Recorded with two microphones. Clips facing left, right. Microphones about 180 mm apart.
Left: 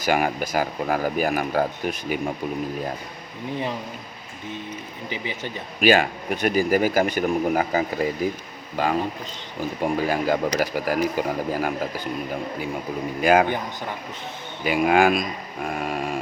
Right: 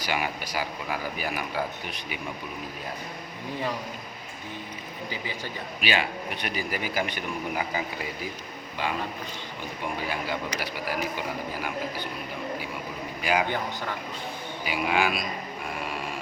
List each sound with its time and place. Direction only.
0.0 s speech: 45° left (ahead or behind)
5.0 s speech: 20° left (ahead or behind)
5.8 s speech: 45° left (ahead or behind)
13.2 s speech: 50° left (ahead or behind)
14.6 s speech: 55° left (ahead or behind)